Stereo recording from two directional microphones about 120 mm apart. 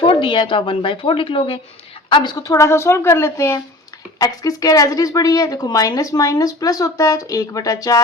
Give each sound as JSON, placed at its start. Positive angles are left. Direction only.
{"t": 0.0, "sound": "a woman's voice", "side_deg": 45}